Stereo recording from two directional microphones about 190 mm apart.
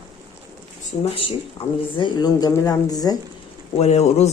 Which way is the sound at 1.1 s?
30° left (ahead or behind).